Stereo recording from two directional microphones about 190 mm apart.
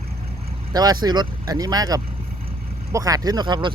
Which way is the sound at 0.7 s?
20° right (ahead or behind).